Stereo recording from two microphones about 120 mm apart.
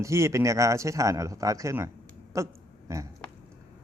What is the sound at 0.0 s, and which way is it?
Speech, 25° right (ahead or behind).